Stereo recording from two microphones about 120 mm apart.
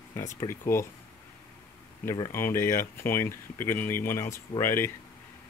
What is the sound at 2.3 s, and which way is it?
Speech, 20° left (ahead or behind).